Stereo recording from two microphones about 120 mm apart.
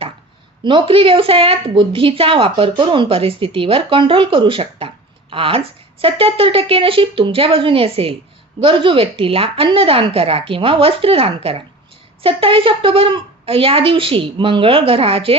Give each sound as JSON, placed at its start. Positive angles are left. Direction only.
{"t": 0.6, "sound": "a woman's voice", "side_deg": -45}